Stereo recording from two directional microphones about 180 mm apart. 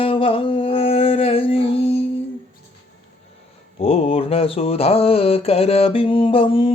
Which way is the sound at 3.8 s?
30° left (ahead or behind).